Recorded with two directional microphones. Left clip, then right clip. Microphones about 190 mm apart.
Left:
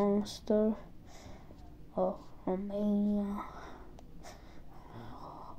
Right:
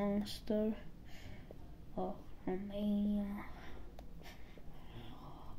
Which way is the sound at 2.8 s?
25° left (ahead or behind).